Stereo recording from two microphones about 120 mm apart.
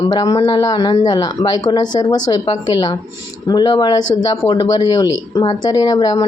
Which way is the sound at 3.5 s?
35° left (ahead or behind).